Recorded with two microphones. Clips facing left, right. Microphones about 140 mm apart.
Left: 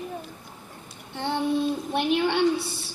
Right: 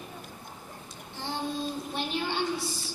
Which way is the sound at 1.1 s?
65° left (ahead or behind).